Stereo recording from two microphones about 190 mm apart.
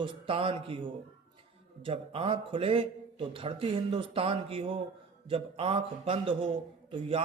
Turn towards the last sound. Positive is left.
turn(degrees=-25)  # may be behind; listen again after turning